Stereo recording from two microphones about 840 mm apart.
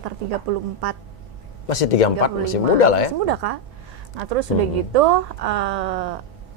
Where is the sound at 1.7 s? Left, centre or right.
Left.